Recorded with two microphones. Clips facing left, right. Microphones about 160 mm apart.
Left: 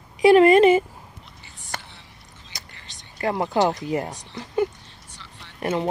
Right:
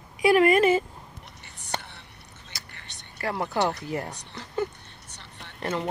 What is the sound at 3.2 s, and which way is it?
Speech, 20° left (ahead or behind).